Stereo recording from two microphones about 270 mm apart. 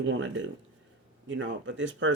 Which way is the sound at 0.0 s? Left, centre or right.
Right.